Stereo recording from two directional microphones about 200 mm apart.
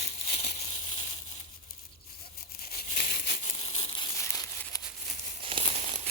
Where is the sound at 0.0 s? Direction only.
35° left (ahead or behind).